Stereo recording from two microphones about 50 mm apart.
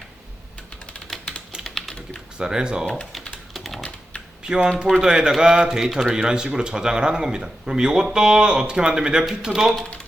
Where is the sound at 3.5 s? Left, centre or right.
Centre.